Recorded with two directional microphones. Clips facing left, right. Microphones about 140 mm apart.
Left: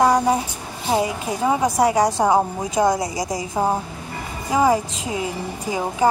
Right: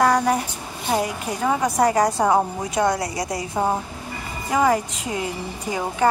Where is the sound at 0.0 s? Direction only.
15° left (ahead or behind).